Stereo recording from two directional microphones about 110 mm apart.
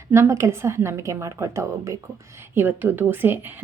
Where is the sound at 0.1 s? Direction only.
25° right (ahead or behind).